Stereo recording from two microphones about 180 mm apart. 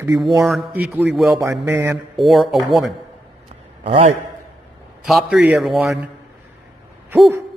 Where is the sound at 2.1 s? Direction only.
Centre (ahead or behind).